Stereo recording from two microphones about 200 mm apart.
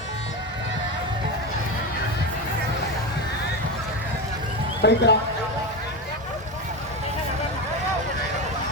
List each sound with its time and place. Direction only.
4.8 s speech: 60° left (ahead or behind)